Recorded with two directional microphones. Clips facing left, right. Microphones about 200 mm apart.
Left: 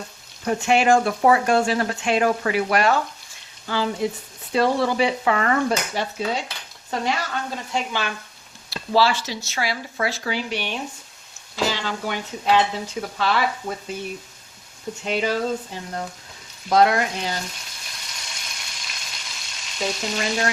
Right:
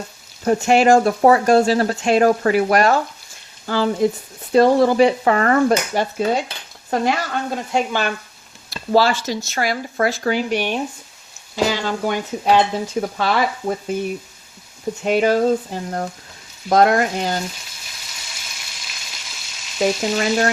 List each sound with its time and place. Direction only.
0.4 s speech: 40° right (ahead or behind)
7.5 s speech: 50° right (ahead or behind)
15.0 s speech: 50° right (ahead or behind)
17.8 s frying: 5° right (ahead or behind)
19.8 s speech: 50° right (ahead or behind)